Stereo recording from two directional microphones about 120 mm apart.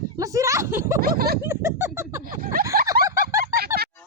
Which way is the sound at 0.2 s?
25° right (ahead or behind).